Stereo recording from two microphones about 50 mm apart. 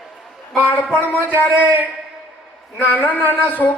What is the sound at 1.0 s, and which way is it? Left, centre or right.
Speech, left.